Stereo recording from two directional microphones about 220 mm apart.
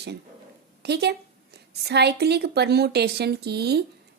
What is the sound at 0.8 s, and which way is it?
A woman's voice, 50° right (ahead or behind).